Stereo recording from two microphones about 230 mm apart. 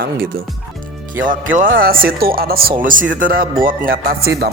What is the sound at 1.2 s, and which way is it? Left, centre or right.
Speech, right.